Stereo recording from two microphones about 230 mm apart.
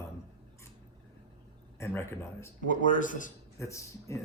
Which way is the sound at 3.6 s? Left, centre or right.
Centre.